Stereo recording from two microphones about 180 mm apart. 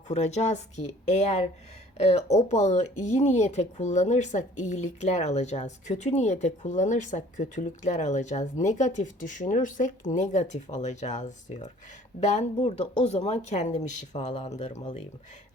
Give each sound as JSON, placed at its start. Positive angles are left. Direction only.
{"t": 0.1, "sound": "speech", "side_deg": 40}